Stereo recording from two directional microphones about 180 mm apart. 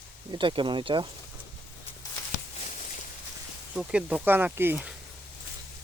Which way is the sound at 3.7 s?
5° right (ahead or behind).